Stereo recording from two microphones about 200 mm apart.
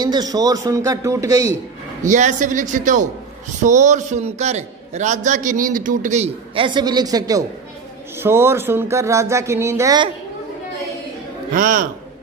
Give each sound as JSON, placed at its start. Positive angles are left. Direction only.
{"t": 0.0, "sound": "speech", "side_deg": -20}
{"t": 2.0, "sound": "a man's voice", "side_deg": -40}
{"t": 11.5, "sound": "a man's voice", "side_deg": -40}